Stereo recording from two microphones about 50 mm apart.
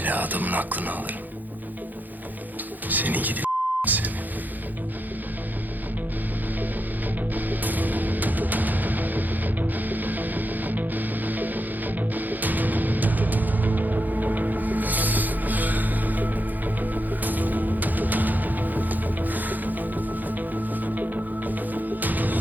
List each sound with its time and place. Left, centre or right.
0.0 s speech: right
2.9 s beep: right
7.3 s music: right